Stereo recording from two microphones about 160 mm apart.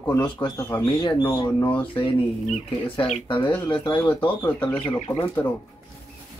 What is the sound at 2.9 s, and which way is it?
Speech, 35° left (ahead or behind).